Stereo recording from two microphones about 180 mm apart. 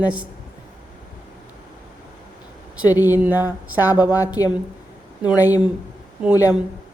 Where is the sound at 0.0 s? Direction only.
5° right (ahead or behind).